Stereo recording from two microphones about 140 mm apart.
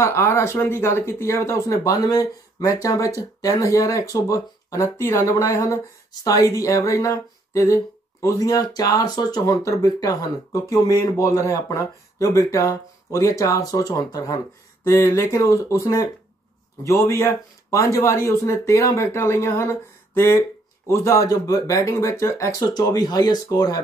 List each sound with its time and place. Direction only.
0.0 s speech: 20° left (ahead or behind)